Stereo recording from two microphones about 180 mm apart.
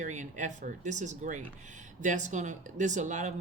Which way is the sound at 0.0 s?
45° right (ahead or behind).